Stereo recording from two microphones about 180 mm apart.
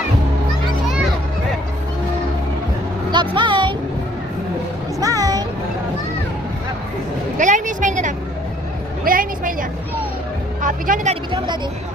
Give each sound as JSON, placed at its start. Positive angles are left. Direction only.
{"t": 3.1, "sound": "music", "side_deg": -25}
{"t": 4.9, "sound": "music", "side_deg": -20}
{"t": 7.3, "sound": "vehicle", "side_deg": -45}
{"t": 10.6, "sound": "speech", "side_deg": -50}
{"t": 11.1, "sound": "speech", "side_deg": -25}